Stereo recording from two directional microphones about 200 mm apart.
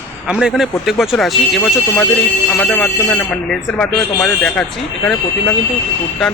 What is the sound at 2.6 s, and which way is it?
Speech, 5° left (ahead or behind).